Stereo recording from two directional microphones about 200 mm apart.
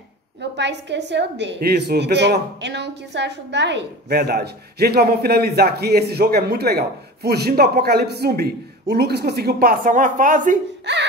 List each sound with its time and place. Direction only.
0.4 s a woman's voice: 60° right (ahead or behind); by 10.6 s 40° right (ahead or behind)
10.9 s a woman's voice: 60° right (ahead or behind)